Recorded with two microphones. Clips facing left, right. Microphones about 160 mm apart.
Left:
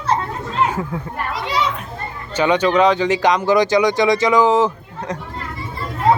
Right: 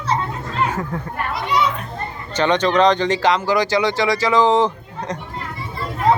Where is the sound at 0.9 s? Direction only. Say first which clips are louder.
Even; 5° left (ahead or behind).